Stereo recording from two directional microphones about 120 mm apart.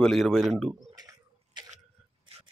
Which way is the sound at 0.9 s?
30° right (ahead or behind).